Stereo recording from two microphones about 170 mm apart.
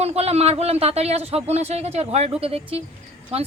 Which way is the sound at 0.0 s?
40° right (ahead or behind).